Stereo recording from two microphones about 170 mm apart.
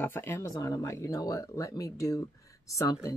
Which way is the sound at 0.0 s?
10° left (ahead or behind).